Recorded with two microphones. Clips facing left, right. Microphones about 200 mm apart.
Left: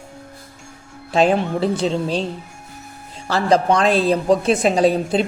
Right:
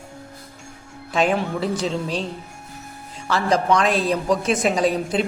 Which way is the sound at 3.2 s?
35° left (ahead or behind).